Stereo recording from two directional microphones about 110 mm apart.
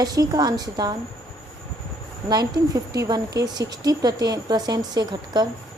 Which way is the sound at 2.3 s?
40° right (ahead or behind).